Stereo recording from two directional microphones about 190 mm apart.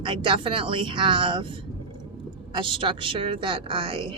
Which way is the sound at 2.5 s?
25° right (ahead or behind).